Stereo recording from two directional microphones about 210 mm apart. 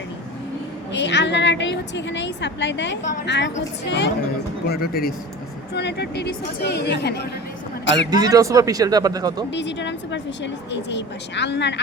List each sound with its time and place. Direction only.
0.9 s a woman's voice: 55° left (ahead or behind)
8.1 s speech: 15° right (ahead or behind)
9.5 s speech: 60° left (ahead or behind)